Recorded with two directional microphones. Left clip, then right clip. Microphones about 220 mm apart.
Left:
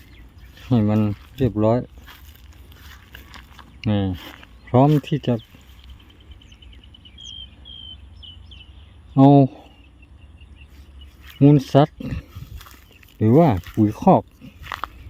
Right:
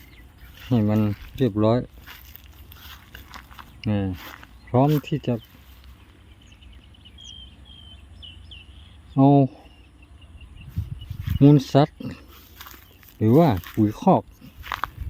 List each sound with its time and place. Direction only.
0.7 s speech: 10° left (ahead or behind)
2.8 s a sound: 5° right (ahead or behind)
3.8 s speech: 15° left (ahead or behind)
4.1 s a sound: 5° right (ahead or behind)
4.7 s a sound: 20° left (ahead or behind)
5.0 s speech: 15° left (ahead or behind)
9.1 s speech: 15° left (ahead or behind)
11.3 s speech: centre (ahead or behind)
12.5 s walk: 5° right (ahead or behind)
13.1 s speech: 10° left (ahead or behind)
14.6 s biting: 5° right (ahead or behind)